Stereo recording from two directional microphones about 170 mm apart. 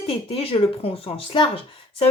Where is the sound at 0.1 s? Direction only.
35° left (ahead or behind).